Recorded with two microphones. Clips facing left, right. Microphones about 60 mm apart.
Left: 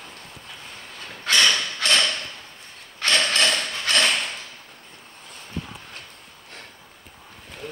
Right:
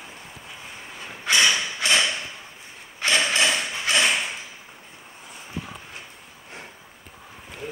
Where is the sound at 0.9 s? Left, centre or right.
Centre.